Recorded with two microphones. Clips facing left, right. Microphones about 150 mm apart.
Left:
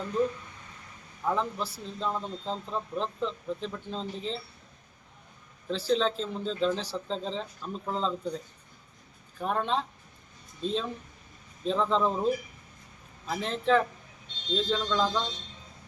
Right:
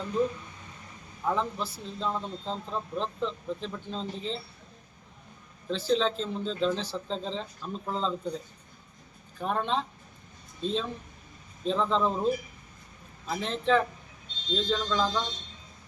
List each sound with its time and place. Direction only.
1.2 s a man's voice: centre (ahead or behind)
5.7 s a man's voice: 5° left (ahead or behind)
9.4 s a man's voice: centre (ahead or behind)